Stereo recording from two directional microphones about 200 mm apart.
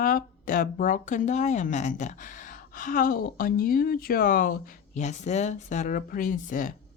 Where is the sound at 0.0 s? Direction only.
45° left (ahead or behind).